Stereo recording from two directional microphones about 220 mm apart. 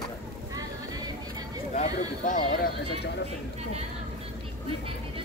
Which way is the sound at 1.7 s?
35° left (ahead or behind).